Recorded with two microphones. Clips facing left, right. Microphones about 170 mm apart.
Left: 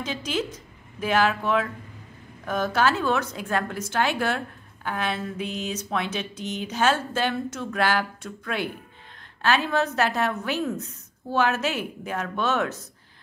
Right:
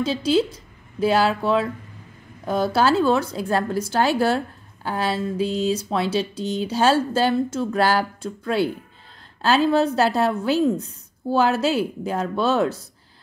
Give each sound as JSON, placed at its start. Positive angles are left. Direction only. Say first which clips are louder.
{"t": 0.0, "sound": "speech", "louder": "right 9 dB", "side_deg": -30}